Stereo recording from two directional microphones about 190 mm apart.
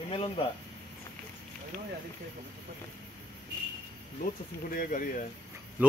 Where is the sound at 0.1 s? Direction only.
30° left (ahead or behind).